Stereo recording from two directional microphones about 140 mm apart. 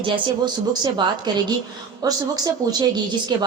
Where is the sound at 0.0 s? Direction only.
30° right (ahead or behind).